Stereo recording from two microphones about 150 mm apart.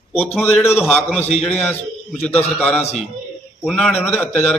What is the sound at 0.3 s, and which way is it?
A man's voice, 15° left (ahead or behind).